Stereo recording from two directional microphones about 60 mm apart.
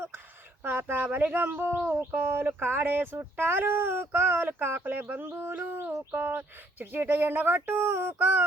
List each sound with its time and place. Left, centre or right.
0.6 s speech: right